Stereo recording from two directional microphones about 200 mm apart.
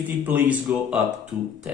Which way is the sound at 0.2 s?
10° right (ahead or behind).